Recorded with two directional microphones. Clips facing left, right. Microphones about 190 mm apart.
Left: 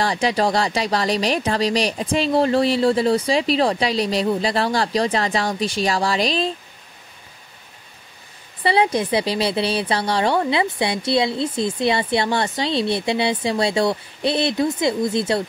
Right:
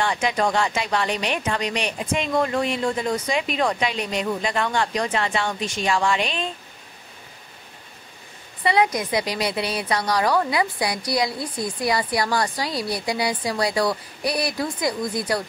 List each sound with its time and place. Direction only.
0.0 s speech: 35° left (ahead or behind)
8.6 s speech: 30° left (ahead or behind)